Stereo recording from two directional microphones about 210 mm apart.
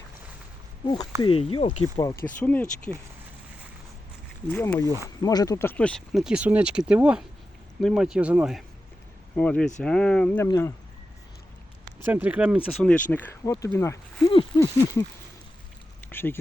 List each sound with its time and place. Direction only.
1.2 s speech: 25° left (ahead or behind)
2.4 s speech: 5° left (ahead or behind)
4.4 s speech: 10° left (ahead or behind)
9.3 s speech: 5° left (ahead or behind)
12.0 s speech: 10° right (ahead or behind)
12.9 s speech: 10° left (ahead or behind)
16.0 s speech: 10° left (ahead or behind)